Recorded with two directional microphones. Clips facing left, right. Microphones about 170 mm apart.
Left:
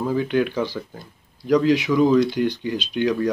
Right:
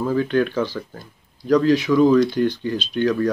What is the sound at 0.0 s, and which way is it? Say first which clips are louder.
Speech: right 1 dB; 15° left (ahead or behind).